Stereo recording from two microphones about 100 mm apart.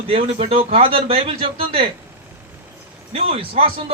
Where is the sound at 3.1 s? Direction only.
70° right (ahead or behind).